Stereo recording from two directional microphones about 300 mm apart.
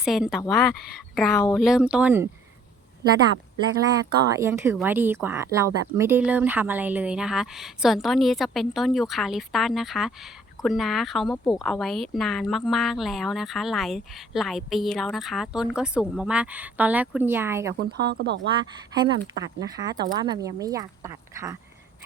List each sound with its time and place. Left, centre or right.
0.0 s speech: centre
4.2 s speech: centre
17.7 s speech: right
19.3 s speech: centre